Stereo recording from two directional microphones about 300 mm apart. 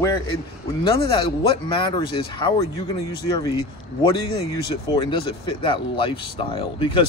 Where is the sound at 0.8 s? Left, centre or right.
Centre.